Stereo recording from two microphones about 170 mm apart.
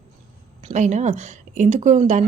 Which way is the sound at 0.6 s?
45° right (ahead or behind).